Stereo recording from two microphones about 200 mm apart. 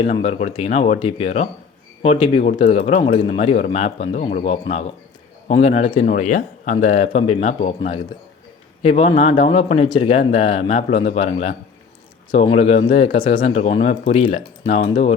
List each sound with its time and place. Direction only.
0.0 s speech: 30° left (ahead or behind)